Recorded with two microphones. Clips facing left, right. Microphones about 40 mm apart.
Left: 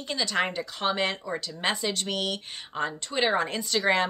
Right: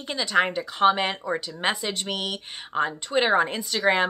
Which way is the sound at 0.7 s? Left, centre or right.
Centre.